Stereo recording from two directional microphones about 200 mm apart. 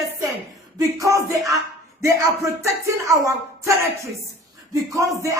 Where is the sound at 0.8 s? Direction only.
15° right (ahead or behind).